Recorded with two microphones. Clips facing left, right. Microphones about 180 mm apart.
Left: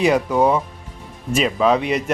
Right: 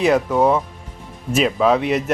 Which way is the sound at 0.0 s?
Centre (ahead or behind).